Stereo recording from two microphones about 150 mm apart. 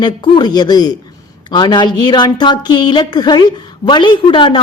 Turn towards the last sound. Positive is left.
turn(degrees=35)  # may be behind; listen again after turning